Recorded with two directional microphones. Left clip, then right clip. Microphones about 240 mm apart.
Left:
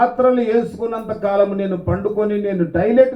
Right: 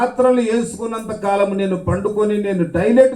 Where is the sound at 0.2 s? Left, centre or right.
Right.